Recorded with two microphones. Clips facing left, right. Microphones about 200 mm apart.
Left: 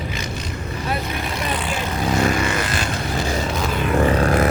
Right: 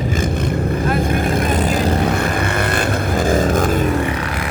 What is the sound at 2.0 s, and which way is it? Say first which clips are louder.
Vehicle: right 1 dB; 55° right (ahead or behind).